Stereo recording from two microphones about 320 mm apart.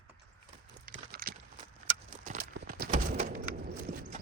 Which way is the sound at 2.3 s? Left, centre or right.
Right.